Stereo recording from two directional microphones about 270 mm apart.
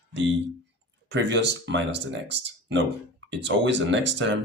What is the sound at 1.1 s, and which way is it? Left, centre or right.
Speech, right.